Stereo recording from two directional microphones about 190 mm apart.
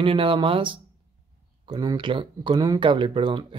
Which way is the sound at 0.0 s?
25° right (ahead or behind).